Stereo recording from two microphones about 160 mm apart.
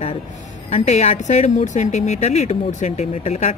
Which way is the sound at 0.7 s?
45° left (ahead or behind).